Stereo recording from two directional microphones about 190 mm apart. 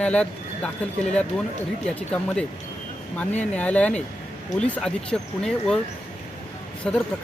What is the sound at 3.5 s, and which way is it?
A man's voice, 5° left (ahead or behind).